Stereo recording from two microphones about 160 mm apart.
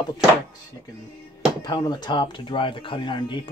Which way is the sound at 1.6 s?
25° left (ahead or behind).